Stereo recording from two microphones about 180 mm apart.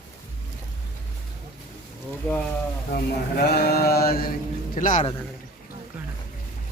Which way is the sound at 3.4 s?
60° left (ahead or behind).